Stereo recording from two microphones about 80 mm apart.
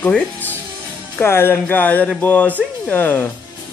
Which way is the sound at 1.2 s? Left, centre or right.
Left.